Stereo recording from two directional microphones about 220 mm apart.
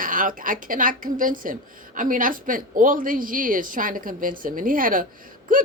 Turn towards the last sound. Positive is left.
turn(degrees=-40)  # may be behind; listen again after turning